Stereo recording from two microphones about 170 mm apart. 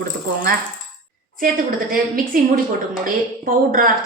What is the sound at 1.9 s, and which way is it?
A woman's voice, 55° right (ahead or behind).